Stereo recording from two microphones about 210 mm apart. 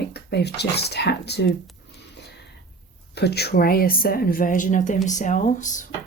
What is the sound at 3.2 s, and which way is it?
A woman's voice, 50° left (ahead or behind).